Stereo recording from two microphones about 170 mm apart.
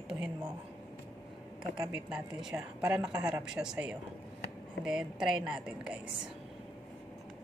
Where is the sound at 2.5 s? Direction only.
15° right (ahead or behind).